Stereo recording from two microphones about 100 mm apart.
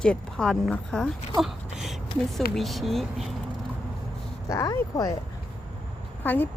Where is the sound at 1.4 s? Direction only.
5° right (ahead or behind).